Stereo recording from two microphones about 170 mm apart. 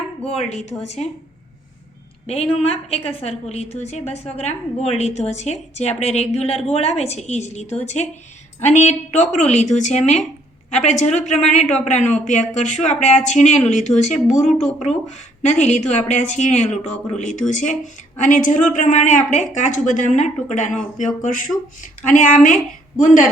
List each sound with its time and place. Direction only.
0.2 s a woman's voice: 40° left (ahead or behind)
2.2 s a woman's voice: 35° left (ahead or behind)
14.4 s speech: centre (ahead or behind)
14.8 s speech: 45° left (ahead or behind)